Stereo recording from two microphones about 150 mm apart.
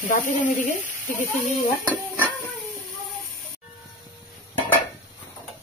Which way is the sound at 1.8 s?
15° right (ahead or behind).